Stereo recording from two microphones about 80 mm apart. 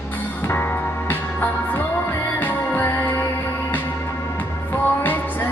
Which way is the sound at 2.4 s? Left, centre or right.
Left.